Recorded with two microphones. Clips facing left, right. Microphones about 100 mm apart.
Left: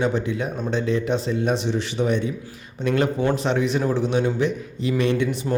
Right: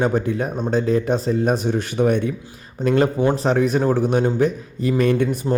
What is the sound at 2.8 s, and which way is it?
A man's voice, 35° right (ahead or behind).